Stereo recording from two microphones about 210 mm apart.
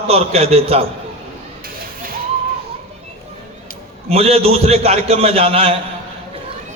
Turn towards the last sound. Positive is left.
turn(degrees=-25)  # may be behind; listen again after turning